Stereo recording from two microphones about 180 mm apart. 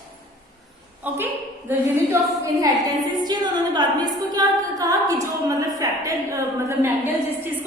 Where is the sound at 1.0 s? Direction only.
10° right (ahead or behind).